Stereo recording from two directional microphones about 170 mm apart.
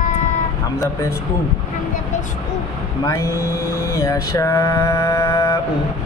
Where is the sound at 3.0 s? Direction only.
20° left (ahead or behind).